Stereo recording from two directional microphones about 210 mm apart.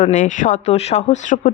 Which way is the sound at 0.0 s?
35° left (ahead or behind).